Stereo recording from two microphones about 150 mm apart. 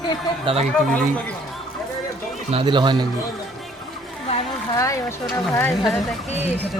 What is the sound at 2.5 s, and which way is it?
Speech, 35° right (ahead or behind).